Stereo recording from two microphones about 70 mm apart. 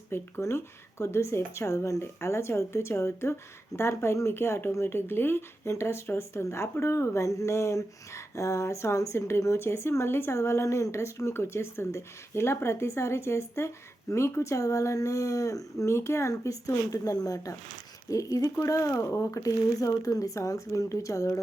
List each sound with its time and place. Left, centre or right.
0.1 s speech: left